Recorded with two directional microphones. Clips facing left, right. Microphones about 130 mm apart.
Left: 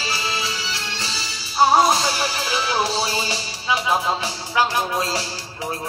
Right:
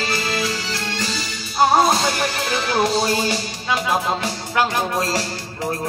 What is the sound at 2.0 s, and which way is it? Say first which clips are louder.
Music: right 2 dB; 55° right (ahead or behind).